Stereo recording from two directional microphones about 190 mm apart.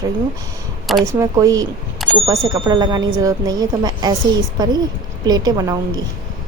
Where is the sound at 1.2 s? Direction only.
20° right (ahead or behind).